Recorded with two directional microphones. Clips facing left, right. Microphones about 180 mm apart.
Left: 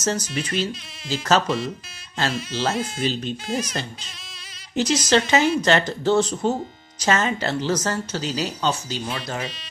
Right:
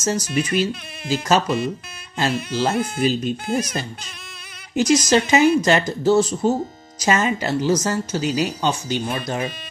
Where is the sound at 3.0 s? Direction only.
10° right (ahead or behind).